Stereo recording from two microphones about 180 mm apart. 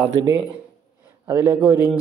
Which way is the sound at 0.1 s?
20° right (ahead or behind).